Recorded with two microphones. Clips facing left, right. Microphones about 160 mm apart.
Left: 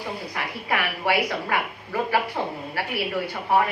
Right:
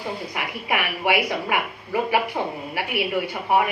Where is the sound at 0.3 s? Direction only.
15° right (ahead or behind).